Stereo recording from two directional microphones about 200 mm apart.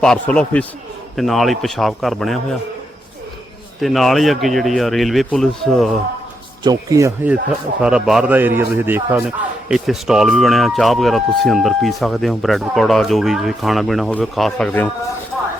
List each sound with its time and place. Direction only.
0.0 s a man's voice: 5° left (ahead or behind)
3.8 s a man's voice: centre (ahead or behind)
6.7 s speech: 15° right (ahead or behind)
7.8 s a man's voice: 5° right (ahead or behind)